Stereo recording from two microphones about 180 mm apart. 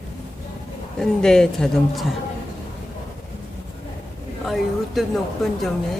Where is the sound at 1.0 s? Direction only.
5° left (ahead or behind).